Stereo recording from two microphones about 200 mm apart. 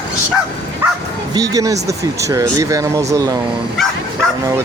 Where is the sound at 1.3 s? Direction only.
20° right (ahead or behind).